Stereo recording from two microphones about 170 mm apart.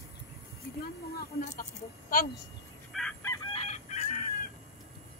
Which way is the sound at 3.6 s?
45° left (ahead or behind).